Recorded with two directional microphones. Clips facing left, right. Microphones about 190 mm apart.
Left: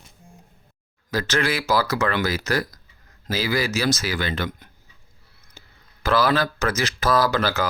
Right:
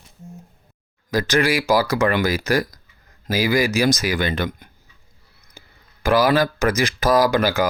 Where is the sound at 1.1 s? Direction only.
15° right (ahead or behind).